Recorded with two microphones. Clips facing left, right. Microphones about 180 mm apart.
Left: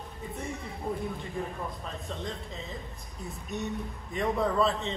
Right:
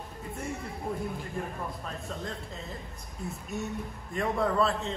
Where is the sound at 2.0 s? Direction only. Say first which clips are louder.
Left 2 dB; centre (ahead or behind).